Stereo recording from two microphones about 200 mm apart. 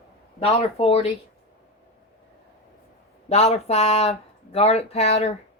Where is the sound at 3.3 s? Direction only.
30° left (ahead or behind).